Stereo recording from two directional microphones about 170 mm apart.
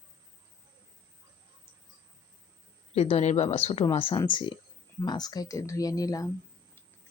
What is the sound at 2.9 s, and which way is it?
Speech, 35° left (ahead or behind).